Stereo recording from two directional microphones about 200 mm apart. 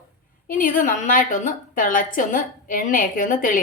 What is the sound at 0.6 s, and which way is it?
A woman's voice, 40° left (ahead or behind).